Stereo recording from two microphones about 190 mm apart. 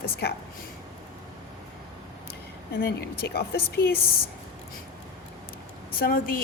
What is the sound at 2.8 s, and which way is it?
A woman's voice, 55° left (ahead or behind).